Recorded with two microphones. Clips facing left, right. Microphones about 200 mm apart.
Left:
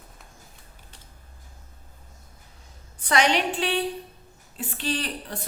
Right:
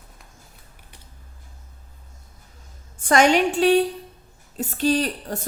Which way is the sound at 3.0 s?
45° right (ahead or behind).